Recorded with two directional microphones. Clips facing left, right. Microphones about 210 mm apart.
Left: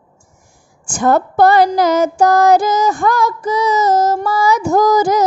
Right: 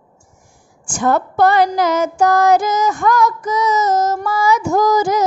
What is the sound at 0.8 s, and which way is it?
Female singing, 40° left (ahead or behind).